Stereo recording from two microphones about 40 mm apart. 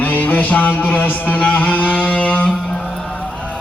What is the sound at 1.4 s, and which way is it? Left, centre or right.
Music, left.